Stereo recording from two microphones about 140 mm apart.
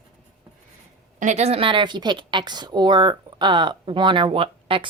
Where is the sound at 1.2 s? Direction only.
55° right (ahead or behind).